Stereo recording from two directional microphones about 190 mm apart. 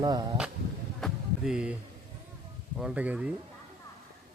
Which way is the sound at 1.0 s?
5° right (ahead or behind).